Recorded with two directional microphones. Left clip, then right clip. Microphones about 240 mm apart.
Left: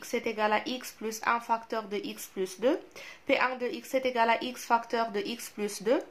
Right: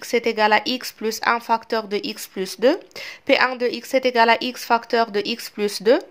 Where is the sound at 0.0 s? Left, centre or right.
Right.